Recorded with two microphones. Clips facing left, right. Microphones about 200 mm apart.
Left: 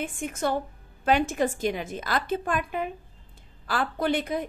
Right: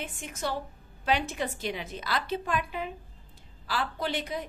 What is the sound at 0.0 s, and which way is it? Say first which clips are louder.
A woman's voice: left 6 dB; 50° left (ahead or behind).